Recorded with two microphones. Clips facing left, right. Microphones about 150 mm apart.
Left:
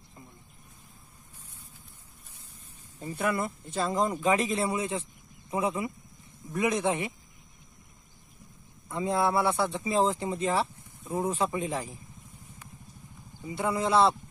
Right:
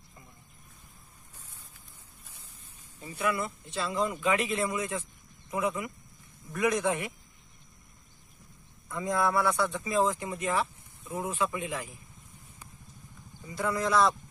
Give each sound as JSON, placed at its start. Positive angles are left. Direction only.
{"t": 3.0, "sound": "speech", "side_deg": 50}
{"t": 8.8, "sound": "speech", "side_deg": 25}
{"t": 13.5, "sound": "speech", "side_deg": 25}